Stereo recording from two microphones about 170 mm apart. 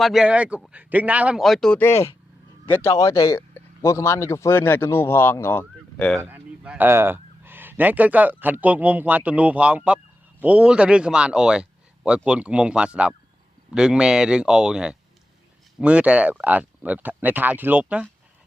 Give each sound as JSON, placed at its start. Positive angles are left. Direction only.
{"t": 0.0, "sound": "speech", "side_deg": 0}
{"t": 6.2, "sound": "speech", "side_deg": -10}